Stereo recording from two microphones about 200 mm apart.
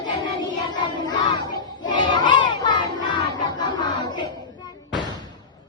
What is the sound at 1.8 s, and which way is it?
Battle cry, 20° left (ahead or behind).